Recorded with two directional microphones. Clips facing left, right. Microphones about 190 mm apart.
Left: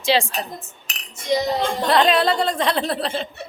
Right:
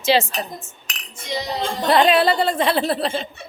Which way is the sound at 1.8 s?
5° right (ahead or behind).